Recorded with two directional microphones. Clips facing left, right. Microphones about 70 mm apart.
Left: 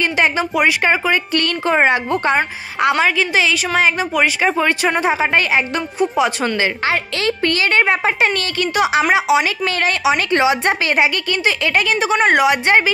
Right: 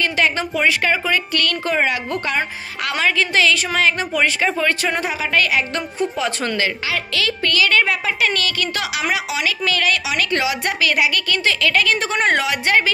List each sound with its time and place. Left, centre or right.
0.0 s a woman's voice: left
5.9 s speech: centre
6.9 s a woman's voice: left
12.0 s speech: centre
12.4 s a woman's voice: left